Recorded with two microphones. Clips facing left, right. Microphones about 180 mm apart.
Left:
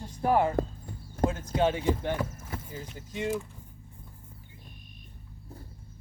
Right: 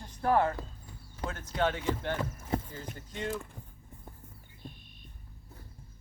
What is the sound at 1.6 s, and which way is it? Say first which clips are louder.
Speech: left 4 dB; 15° left (ahead or behind).